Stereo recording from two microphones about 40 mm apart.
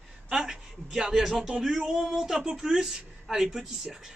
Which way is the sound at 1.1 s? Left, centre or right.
Centre.